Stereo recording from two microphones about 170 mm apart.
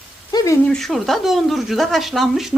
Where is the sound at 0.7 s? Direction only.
Centre (ahead or behind).